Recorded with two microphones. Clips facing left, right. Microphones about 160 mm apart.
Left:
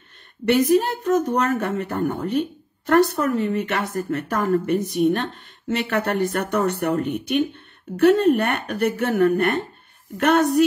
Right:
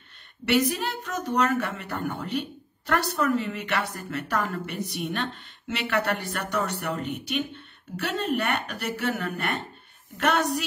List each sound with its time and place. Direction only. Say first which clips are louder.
0.5 s speech: left 7 dB; 45° left (ahead or behind)